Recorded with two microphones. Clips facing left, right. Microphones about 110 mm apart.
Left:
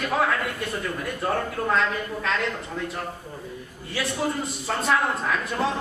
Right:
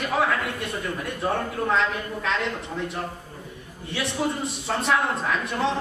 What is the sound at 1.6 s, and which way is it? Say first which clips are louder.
Speech: right 1 dB; centre (ahead or behind).